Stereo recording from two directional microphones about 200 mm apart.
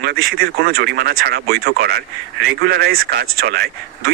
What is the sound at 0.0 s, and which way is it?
Speech, 50° right (ahead or behind).